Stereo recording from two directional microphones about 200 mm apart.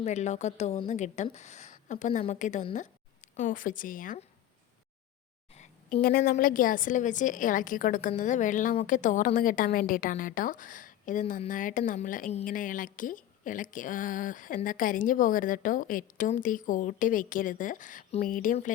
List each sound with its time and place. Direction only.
0.0 s a woman's voice: 35° left (ahead or behind)
5.5 s a woman's voice: 45° left (ahead or behind)